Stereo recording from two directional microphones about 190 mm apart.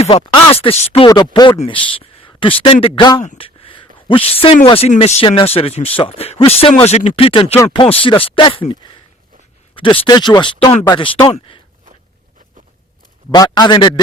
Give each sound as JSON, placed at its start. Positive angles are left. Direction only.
{"t": 0.0, "sound": "speech", "side_deg": 30}
{"t": 3.2, "sound": "a sound", "side_deg": 30}
{"t": 4.6, "sound": "speech", "side_deg": 30}
{"t": 13.3, "sound": "speech", "side_deg": 20}